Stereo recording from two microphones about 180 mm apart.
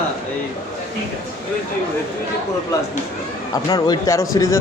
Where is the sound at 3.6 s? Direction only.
20° left (ahead or behind).